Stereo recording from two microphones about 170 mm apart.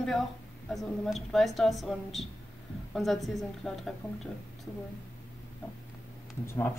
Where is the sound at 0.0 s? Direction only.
Centre (ahead or behind).